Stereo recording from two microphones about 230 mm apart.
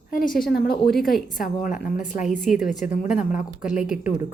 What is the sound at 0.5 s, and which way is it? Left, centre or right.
A woman's voice, left.